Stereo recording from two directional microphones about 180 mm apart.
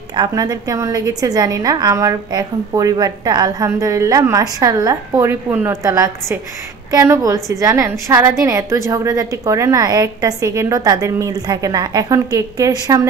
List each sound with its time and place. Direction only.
0.1 s a woman's voice: 25° right (ahead or behind)